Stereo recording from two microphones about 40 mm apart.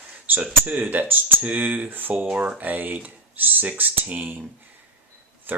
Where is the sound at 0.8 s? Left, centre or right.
Right.